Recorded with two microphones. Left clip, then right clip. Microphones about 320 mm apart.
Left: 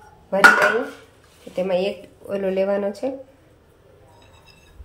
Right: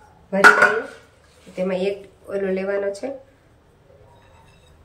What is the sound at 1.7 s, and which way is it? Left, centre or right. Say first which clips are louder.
Speech: left 2 dB; centre.